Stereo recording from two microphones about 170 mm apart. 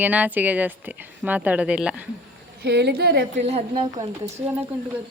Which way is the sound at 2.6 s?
80° right.